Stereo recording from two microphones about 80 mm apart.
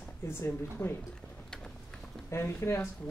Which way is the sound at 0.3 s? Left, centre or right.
Left.